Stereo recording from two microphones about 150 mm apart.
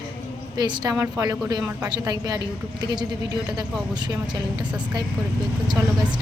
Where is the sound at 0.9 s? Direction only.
10° right (ahead or behind).